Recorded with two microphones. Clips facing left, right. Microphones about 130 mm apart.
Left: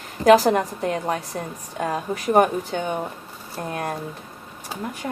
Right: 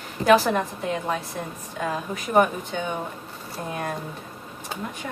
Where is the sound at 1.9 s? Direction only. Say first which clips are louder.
Left 2 dB; 40° left (ahead or behind).